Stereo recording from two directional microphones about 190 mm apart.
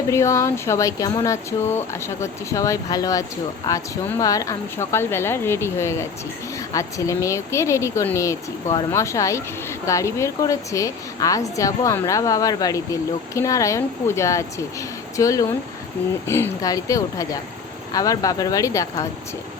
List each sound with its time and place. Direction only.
0.1 s speech: 15° left (ahead or behind)